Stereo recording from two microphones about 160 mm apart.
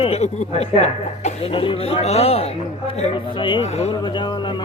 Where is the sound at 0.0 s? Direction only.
40° left (ahead or behind).